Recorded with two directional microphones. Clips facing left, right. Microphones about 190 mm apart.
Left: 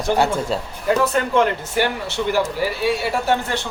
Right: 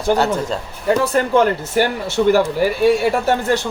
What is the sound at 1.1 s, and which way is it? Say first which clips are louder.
Speech: right 3 dB; 40° right (ahead or behind).